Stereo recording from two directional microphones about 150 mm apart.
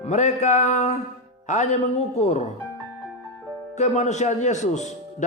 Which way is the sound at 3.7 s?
50° left (ahead or behind).